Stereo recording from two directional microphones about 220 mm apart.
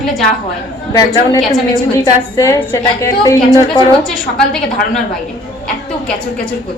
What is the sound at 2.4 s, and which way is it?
Speech, 15° left (ahead or behind).